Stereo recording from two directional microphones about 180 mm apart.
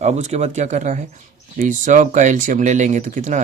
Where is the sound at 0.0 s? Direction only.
40° right (ahead or behind).